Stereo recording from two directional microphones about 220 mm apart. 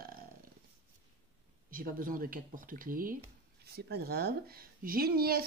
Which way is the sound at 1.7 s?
40° right (ahead or behind).